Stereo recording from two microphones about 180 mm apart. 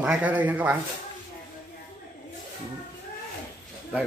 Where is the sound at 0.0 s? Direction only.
10° right (ahead or behind).